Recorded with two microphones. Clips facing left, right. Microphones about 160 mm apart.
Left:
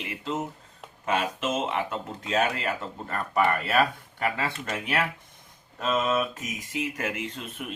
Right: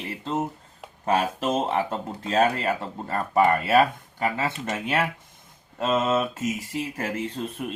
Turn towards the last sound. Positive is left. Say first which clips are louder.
# right 5 dB
turn(degrees=-35)  # may be behind; listen again after turning